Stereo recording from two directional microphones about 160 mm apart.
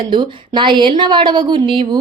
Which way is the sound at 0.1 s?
30° right (ahead or behind).